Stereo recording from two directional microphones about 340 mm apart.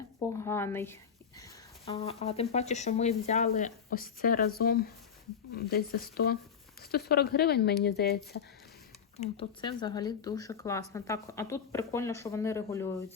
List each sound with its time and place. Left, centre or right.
0.3 s speech: centre; by 8.4 s left
9.2 s speech: centre